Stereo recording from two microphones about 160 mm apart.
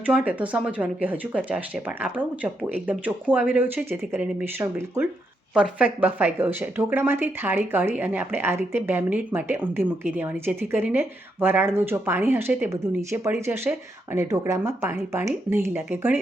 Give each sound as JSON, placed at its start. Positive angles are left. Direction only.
{"t": 0.0, "sound": "speech", "side_deg": -10}